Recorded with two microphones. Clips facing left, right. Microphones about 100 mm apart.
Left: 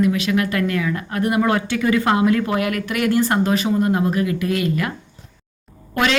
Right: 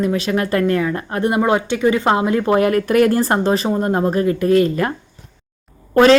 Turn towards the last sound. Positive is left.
turn(degrees=-35)  # may be behind; listen again after turning